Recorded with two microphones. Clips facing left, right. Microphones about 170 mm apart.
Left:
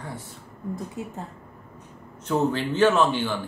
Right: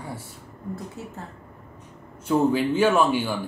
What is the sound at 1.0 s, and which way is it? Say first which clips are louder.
Speech: left 3 dB; 15° left (ahead or behind).